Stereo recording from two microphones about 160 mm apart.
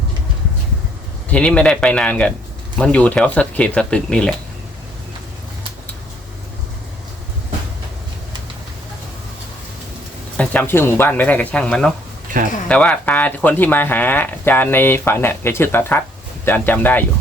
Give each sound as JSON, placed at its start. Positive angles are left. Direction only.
{"t": 1.3, "sound": "speech", "side_deg": 5}
{"t": 10.3, "sound": "speech", "side_deg": 10}
{"t": 12.3, "sound": "speech", "side_deg": -55}
{"t": 12.6, "sound": "speech", "side_deg": 10}